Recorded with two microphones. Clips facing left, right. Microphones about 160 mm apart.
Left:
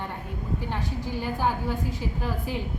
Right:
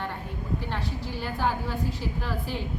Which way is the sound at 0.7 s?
15° left (ahead or behind).